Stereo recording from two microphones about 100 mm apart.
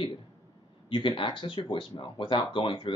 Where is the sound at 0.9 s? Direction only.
55° left (ahead or behind).